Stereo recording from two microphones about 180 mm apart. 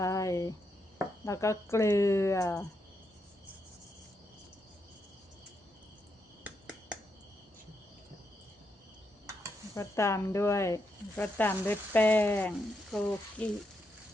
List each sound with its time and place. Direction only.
0.0 s cricket: 20° left (ahead or behind)
1.2 s speech: 15° left (ahead or behind)
9.7 s speech: 15° left (ahead or behind)